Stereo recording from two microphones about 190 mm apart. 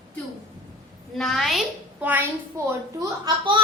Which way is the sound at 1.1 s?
Centre (ahead or behind).